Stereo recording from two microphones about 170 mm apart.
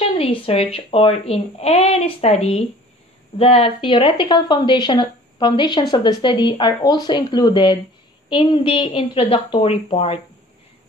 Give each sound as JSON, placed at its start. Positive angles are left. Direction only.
{"t": 0.0, "sound": "speech", "side_deg": 35}